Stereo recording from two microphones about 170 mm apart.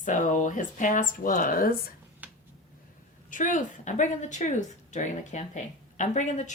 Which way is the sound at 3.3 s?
50° left (ahead or behind).